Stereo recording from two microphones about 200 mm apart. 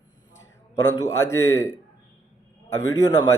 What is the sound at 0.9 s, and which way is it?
Speech, 15° left (ahead or behind).